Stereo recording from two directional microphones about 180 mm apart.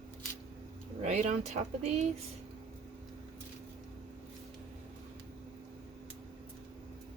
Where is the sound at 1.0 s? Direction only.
40° right (ahead or behind).